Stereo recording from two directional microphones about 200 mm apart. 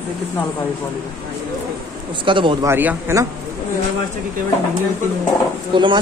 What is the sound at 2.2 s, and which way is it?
Speech, 25° right (ahead or behind).